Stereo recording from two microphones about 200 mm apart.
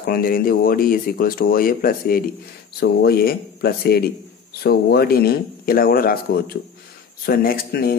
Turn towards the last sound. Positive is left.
turn(degrees=50)  # may be behind; listen again after turning